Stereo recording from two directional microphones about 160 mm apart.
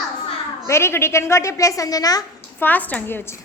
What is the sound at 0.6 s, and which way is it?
A woman's voice, 15° left (ahead or behind).